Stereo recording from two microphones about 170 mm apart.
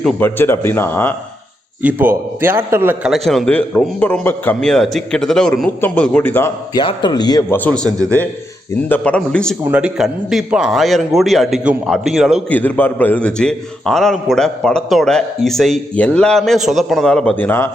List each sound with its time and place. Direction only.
0.0 s speech: 10° left (ahead or behind)
1.8 s a man's voice: 10° right (ahead or behind)
3.1 s a man's voice: centre (ahead or behind)
6.7 s a man's voice: 25° left (ahead or behind)
7.5 s speech: 10° left (ahead or behind)
8.9 s speech: 5° left (ahead or behind)
9.6 s a man's voice: 5° right (ahead or behind)
12.5 s a man's voice: 10° left (ahead or behind)